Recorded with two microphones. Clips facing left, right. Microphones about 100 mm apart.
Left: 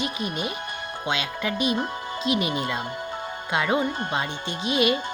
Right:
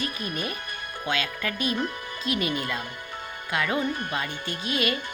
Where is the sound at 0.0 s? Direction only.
20° left (ahead or behind).